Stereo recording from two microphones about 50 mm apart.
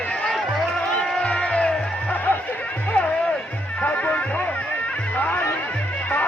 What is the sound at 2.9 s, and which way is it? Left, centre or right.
Music, left.